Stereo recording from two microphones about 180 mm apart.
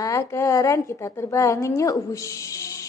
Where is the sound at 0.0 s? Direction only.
15° left (ahead or behind).